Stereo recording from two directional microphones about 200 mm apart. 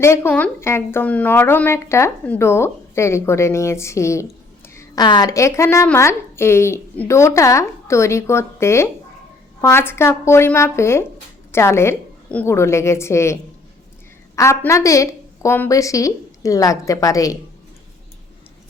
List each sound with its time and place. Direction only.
0.0 s a woman's voice: 10° left (ahead or behind)